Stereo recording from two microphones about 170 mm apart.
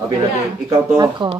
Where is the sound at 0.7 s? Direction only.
25° right (ahead or behind).